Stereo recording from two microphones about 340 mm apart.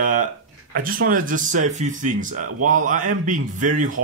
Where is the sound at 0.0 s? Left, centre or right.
Right.